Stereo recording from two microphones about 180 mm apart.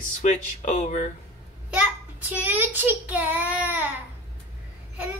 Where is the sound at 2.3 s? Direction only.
10° right (ahead or behind).